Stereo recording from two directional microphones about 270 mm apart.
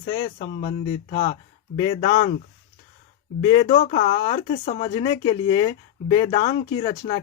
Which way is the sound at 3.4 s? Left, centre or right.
Centre.